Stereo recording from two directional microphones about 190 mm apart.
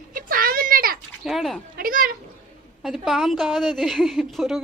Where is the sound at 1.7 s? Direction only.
50° right (ahead or behind).